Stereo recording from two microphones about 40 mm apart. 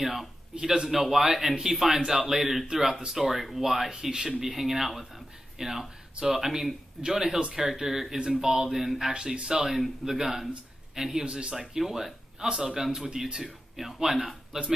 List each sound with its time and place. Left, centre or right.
0.0 s speech: centre
0.6 s speech: centre
3.9 s speech: right
4.3 s speech: centre
9.1 s speech: right
11.2 s speech: right
11.5 s speech: centre